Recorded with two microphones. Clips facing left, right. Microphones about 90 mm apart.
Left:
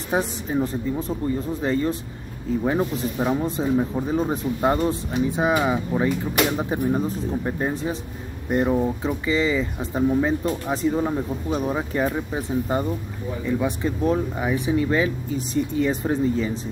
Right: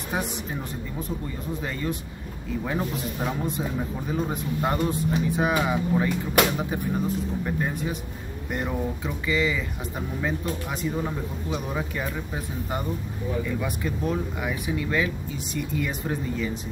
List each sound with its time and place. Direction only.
0.1 s speech: 30° left (ahead or behind)
1.6 s speech: 30° left (ahead or behind)
3.3 s speech: 30° left (ahead or behind)